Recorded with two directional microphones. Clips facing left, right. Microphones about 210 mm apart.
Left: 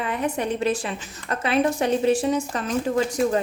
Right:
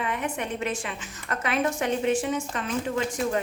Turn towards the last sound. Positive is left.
turn(degrees=35)  # may be behind; listen again after turning